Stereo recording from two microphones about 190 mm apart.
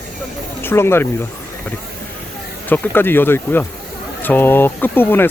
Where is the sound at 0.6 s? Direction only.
15° left (ahead or behind).